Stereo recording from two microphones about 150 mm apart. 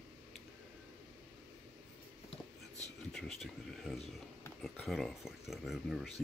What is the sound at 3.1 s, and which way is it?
Speech, centre (ahead or behind).